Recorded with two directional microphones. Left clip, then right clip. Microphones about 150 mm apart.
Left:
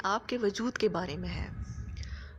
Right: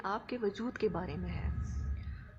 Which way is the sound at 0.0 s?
40° left (ahead or behind).